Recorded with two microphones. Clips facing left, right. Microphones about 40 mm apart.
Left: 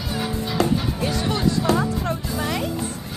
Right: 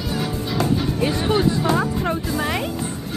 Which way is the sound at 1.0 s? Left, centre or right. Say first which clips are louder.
Right 3 dB; centre.